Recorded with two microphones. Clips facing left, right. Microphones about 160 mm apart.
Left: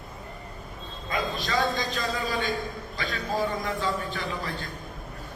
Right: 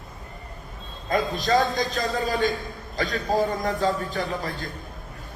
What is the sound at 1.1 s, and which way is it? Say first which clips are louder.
A man's voice: right 6 dB; 40° right (ahead or behind).